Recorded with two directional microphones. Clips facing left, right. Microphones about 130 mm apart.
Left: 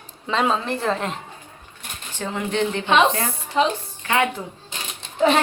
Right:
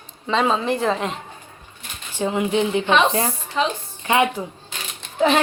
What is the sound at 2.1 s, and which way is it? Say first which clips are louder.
Speech: right 5 dB; 15° right (ahead or behind).